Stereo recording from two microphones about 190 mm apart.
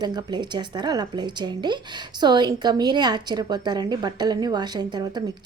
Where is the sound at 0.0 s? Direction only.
20° right (ahead or behind).